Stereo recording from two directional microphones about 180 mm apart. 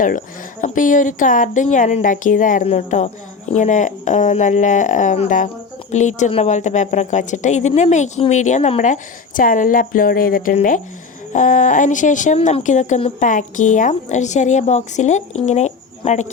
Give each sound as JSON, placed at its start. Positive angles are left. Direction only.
{"t": 0.0, "sound": "speech", "side_deg": 45}